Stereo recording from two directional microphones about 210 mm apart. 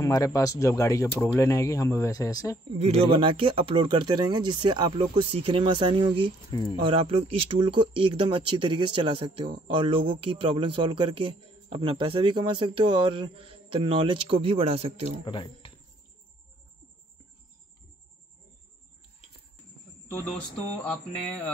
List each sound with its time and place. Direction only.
0.0 s speech: 15° left (ahead or behind)
2.8 s a man's voice: 30° right (ahead or behind)
6.5 s speech: 20° left (ahead or behind)
6.8 s a man's voice: 25° right (ahead or behind)
15.2 s speech: 25° left (ahead or behind)
20.8 s speech: 10° left (ahead or behind)